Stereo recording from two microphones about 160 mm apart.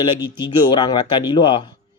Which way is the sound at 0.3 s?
30° left (ahead or behind).